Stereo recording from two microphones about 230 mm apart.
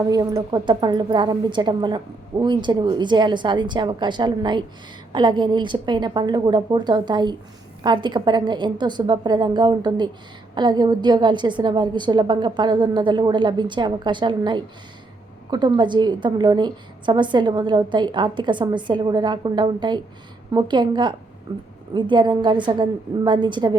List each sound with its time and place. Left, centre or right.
0.1 s a woman's voice: centre